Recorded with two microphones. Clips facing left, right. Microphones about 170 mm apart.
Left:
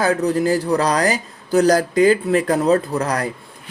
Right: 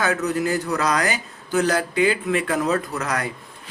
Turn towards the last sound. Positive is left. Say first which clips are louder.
# left 5 dB
turn(degrees=35)  # may be behind; listen again after turning